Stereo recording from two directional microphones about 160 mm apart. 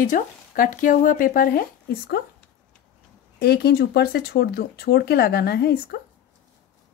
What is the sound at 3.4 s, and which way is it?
Speech, 80° left.